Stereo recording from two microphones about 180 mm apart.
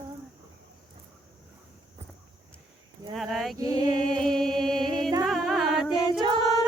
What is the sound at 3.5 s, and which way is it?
Mantra, 20° right (ahead or behind).